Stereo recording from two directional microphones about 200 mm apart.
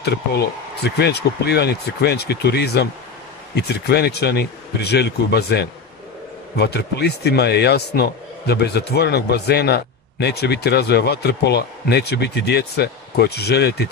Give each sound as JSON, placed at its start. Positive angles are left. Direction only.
{"t": 0.0, "sound": "speech", "side_deg": 55}